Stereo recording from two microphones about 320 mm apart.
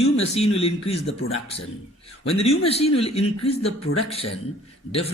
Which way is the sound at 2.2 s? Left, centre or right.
Centre.